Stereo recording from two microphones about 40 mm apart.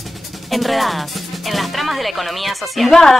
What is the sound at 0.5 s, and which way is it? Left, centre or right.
Speech, centre.